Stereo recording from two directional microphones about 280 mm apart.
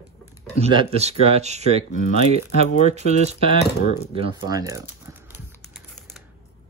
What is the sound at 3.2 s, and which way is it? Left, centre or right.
Speech, right.